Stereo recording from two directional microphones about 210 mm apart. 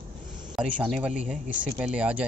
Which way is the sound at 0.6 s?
Centre (ahead or behind).